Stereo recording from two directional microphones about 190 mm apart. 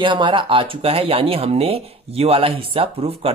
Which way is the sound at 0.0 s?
25° right (ahead or behind).